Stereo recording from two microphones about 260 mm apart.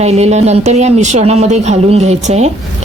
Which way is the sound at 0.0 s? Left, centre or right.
Right.